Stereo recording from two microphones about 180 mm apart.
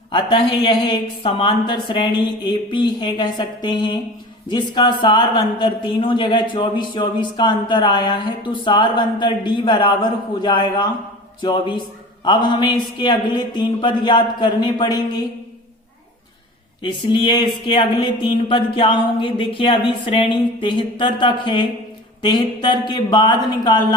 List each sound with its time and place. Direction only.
0.1 s speech: 25° left (ahead or behind)
16.8 s speech: 25° left (ahead or behind)